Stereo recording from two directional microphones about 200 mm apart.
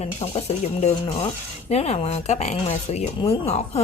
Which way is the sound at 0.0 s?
35° left (ahead or behind).